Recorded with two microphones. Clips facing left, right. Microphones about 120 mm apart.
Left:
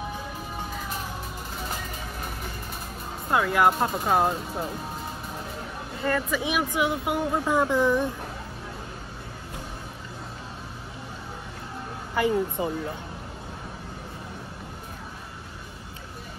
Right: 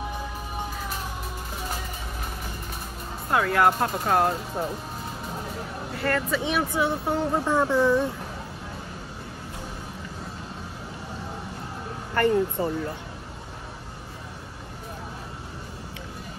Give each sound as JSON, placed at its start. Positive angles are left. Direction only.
{"t": 3.3, "sound": "speech", "side_deg": 15}
{"t": 5.9, "sound": "speech", "side_deg": 10}
{"t": 12.1, "sound": "speech", "side_deg": 10}